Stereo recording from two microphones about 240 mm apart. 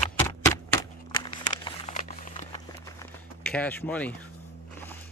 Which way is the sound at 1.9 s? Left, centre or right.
Left.